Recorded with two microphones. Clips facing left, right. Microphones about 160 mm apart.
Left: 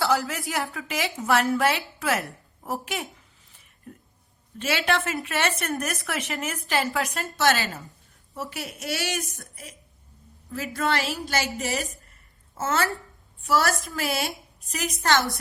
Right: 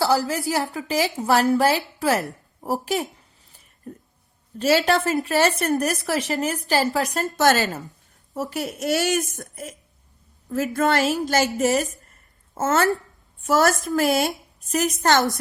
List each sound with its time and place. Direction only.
0.0 s a woman's voice: 35° right (ahead or behind)
10.8 s a woman's voice: 50° right (ahead or behind)